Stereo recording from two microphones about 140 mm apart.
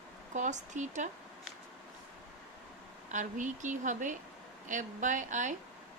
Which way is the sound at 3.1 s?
60° right (ahead or behind).